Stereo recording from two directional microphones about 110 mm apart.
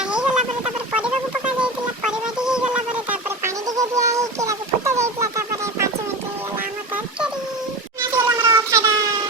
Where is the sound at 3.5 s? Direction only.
30° right (ahead or behind).